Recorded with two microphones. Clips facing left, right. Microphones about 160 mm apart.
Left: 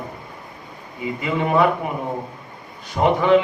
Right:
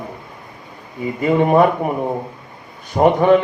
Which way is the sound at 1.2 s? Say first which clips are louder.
Right 7 dB; 45° right (ahead or behind).